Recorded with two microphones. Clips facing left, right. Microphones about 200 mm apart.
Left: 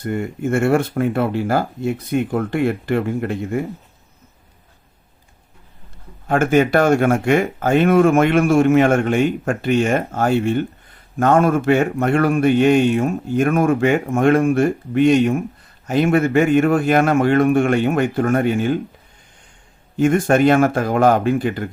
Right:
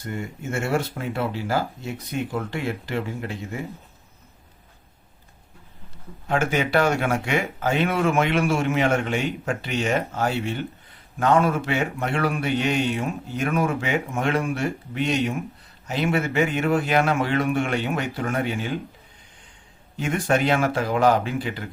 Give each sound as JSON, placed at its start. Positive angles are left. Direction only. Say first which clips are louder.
{"t": 0.0, "sound": "speech", "louder": "left 9 dB", "side_deg": 55}
{"t": 6.2, "sound": "speech", "louder": "left 8 dB", "side_deg": 50}
{"t": 20.0, "sound": "speech", "louder": "left 8 dB", "side_deg": 50}